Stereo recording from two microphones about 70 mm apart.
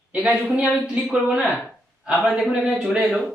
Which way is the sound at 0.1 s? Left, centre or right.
Centre.